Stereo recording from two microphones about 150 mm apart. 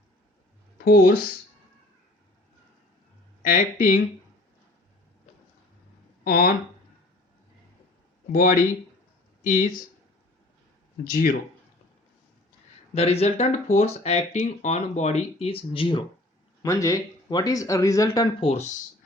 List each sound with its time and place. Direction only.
0.9 s speech: 90° left
3.4 s speech: 65° left (ahead or behind)
6.2 s speech: 85° left
8.3 s speech: 70° left (ahead or behind)
11.0 s speech: 70° left (ahead or behind)
12.9 s speech: 45° left (ahead or behind)
16.6 s speech: 20° left (ahead or behind)
18.3 s speech: 45° left (ahead or behind)